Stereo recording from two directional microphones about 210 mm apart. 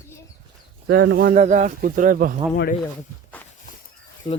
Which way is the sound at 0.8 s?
55° right (ahead or behind).